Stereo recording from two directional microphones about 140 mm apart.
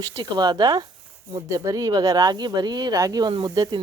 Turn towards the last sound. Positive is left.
turn(degrees=-25)  # may be behind; listen again after turning